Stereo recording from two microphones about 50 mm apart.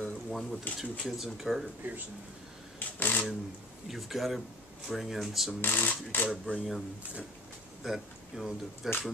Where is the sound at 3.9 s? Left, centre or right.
Centre.